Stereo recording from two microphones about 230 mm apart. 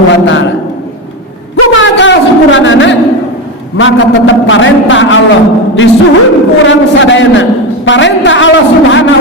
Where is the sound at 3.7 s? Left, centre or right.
Left.